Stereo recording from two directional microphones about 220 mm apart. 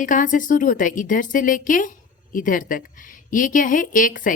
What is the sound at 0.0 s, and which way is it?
A woman's voice, 35° left (ahead or behind).